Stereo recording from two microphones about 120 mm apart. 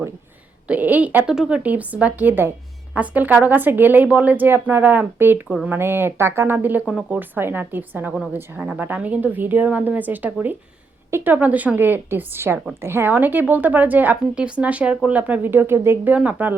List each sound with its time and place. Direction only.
0.7 s a woman's voice: 15° right (ahead or behind)